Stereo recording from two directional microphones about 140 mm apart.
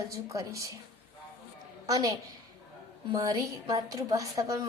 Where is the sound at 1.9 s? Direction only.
25° right (ahead or behind).